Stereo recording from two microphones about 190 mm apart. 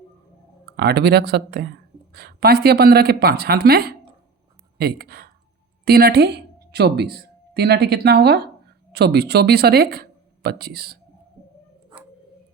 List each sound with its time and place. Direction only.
0.8 s a woman's voice: 60° right (ahead or behind)